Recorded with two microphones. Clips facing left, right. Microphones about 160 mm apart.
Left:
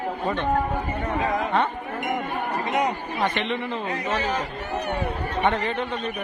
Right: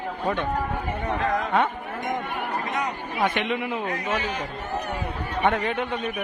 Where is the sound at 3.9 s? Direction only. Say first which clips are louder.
Left 2 dB; 40° left (ahead or behind).